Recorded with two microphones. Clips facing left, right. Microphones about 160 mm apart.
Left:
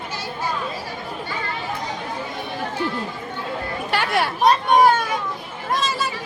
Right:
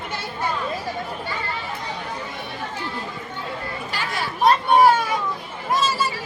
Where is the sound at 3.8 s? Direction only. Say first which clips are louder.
Left 8 dB; 65° left (ahead or behind).